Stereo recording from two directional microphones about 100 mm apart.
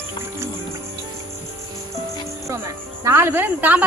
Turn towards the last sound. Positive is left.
turn(degrees=-20)  # may be behind; listen again after turning